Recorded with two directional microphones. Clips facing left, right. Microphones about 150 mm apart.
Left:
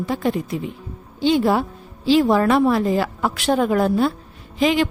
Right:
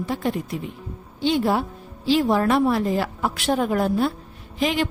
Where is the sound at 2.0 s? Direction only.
90° left.